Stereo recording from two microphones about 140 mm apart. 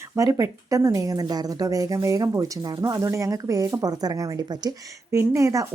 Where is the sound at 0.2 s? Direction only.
25° right (ahead or behind).